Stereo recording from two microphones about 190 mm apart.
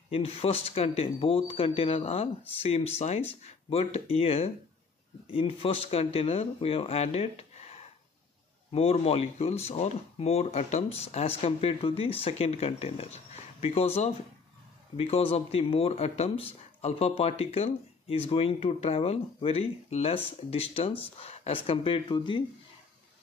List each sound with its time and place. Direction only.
0.1 s speech: 30° left (ahead or behind)